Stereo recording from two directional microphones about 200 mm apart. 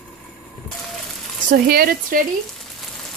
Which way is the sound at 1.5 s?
45° right (ahead or behind).